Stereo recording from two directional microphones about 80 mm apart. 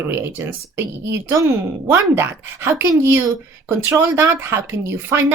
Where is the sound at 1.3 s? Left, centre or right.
Right.